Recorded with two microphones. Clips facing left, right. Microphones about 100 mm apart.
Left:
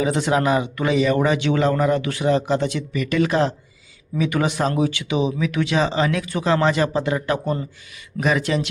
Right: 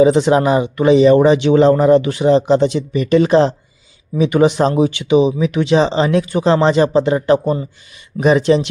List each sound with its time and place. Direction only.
0.0 s speech: 25° right (ahead or behind)